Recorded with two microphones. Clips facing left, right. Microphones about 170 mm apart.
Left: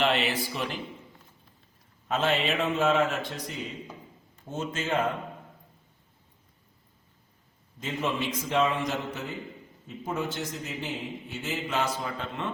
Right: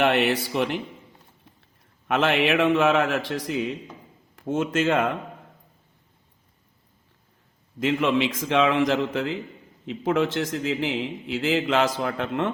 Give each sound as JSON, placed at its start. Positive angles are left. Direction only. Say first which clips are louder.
{"t": 0.0, "sound": "speech", "louder": "right 5 dB", "side_deg": -60}
{"t": 2.0, "sound": "a man's voice", "louder": "right 5 dB", "side_deg": -90}
{"t": 7.8, "sound": "a man's voice", "louder": "right 9 dB", "side_deg": -90}